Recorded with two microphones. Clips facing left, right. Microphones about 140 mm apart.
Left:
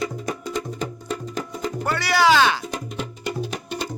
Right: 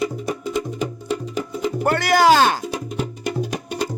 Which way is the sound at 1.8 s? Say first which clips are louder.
Right 4 dB; 55° right (ahead or behind).